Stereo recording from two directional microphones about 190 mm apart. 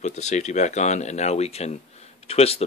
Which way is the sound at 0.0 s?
35° left (ahead or behind).